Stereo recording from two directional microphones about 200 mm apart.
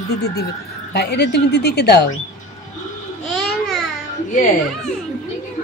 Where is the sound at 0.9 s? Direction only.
55° left (ahead or behind).